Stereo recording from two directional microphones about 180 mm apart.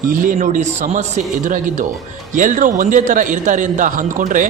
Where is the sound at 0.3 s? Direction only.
45° right (ahead or behind).